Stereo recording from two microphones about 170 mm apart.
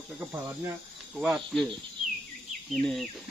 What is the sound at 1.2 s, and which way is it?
Speech, 5° right (ahead or behind).